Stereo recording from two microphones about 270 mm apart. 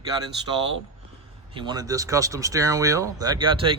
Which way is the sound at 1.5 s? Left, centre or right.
Centre.